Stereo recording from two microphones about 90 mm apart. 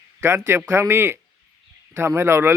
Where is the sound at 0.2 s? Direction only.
30° right (ahead or behind).